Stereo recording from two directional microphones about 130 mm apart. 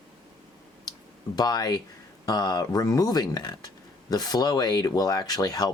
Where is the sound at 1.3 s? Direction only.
30° left (ahead or behind).